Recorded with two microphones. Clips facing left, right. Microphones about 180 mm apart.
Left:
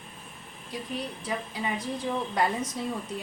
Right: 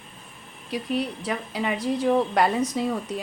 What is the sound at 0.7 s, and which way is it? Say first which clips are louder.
A woman's voice: right 8 dB; 70° right (ahead or behind).